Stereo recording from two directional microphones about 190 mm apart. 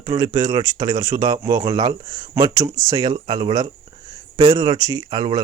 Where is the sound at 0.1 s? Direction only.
20° right (ahead or behind).